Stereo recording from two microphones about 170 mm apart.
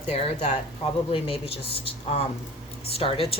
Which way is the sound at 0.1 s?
40° left (ahead or behind).